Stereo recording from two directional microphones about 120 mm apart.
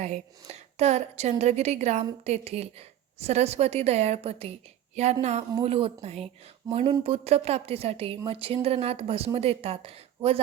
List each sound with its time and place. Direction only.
0.0 s a woman's voice: 70° right (ahead or behind)
5.2 s speech: 65° right (ahead or behind)
5.6 s a woman's voice: 55° right (ahead or behind)